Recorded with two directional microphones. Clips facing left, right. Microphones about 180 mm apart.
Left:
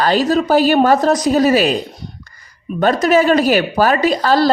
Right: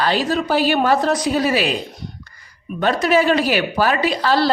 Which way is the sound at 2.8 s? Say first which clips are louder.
Left 4 dB; 45° left (ahead or behind).